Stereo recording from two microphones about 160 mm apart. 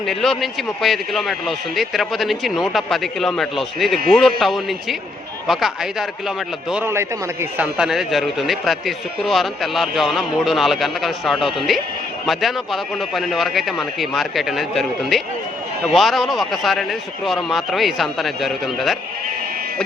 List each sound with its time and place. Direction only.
0.0 s a man's voice: centre (ahead or behind)
6.8 s a man's voice: 15° right (ahead or behind)
7.6 s a man's voice: 5° right (ahead or behind)